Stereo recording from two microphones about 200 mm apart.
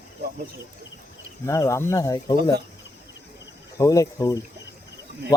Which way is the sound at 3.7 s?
15° left (ahead or behind).